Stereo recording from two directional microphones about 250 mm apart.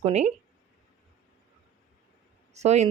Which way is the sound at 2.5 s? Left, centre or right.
Right.